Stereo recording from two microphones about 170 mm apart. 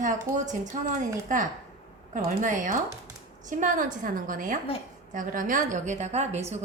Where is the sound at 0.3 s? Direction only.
20° right (ahead or behind).